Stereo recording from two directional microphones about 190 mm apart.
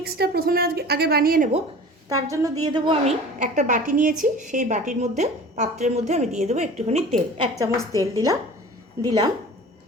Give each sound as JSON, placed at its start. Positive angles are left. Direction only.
{"t": 0.0, "sound": "a woman's voice", "side_deg": -55}
{"t": 2.0, "sound": "a woman's voice", "side_deg": -15}
{"t": 3.3, "sound": "a woman's voice", "side_deg": -40}
{"t": 7.5, "sound": "a woman's voice", "side_deg": -15}